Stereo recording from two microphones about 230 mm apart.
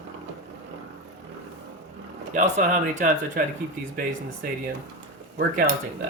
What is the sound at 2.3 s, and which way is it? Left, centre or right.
Speech, right.